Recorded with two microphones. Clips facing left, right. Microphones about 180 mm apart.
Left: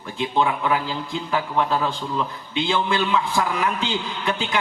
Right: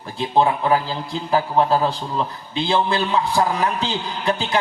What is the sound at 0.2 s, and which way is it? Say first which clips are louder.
A man's voice: right 3 dB; 35° right (ahead or behind).